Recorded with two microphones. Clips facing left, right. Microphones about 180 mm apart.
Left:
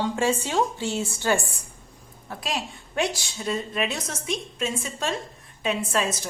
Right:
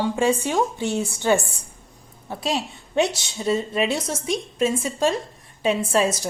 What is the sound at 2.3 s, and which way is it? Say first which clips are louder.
A woman's voice: right 5 dB; 25° right (ahead or behind).